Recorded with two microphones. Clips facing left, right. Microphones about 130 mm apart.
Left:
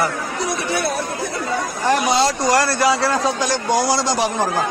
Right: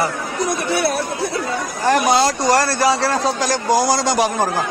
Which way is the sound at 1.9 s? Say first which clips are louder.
Right 2 dB; 45° right (ahead or behind).